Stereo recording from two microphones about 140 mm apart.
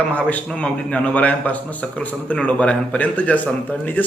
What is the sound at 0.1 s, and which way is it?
A man's voice, 10° left (ahead or behind).